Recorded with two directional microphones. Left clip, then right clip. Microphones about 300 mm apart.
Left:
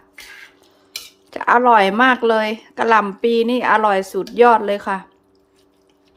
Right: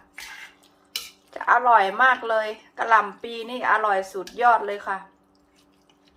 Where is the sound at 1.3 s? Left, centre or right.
Left.